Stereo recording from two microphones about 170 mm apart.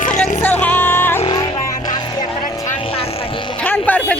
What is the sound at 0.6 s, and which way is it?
Music, 10° left (ahead or behind).